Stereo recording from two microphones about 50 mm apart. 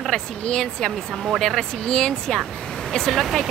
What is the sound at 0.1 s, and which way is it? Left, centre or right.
Speech, centre.